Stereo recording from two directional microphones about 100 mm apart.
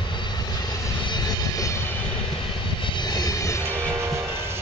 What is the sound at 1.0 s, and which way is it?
Vehicle, 45° left (ahead or behind).